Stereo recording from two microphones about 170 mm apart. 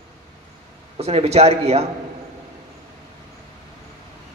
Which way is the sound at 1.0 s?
35° right (ahead or behind).